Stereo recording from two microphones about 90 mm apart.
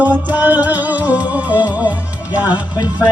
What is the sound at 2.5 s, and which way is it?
Music, 50° left (ahead or behind).